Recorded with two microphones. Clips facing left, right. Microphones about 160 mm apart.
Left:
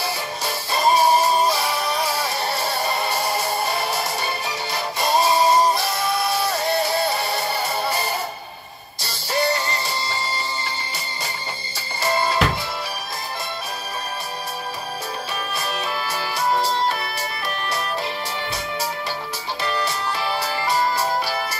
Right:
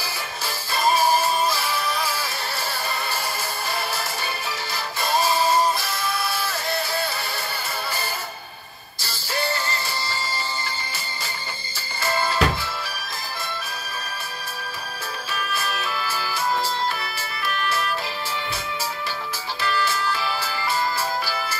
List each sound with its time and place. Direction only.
0.0 s music: 25° left (ahead or behind)
12.0 s music: 25° left (ahead or behind)
15.6 s music: 25° left (ahead or behind)
19.6 s music: 25° left (ahead or behind)